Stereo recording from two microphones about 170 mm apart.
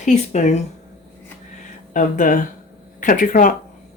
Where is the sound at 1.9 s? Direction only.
50° left (ahead or behind).